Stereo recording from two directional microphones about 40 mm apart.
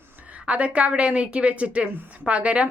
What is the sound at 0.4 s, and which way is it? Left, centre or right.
A woman's voice, right.